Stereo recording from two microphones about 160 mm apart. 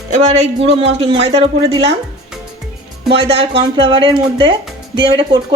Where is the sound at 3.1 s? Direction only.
35° right (ahead or behind).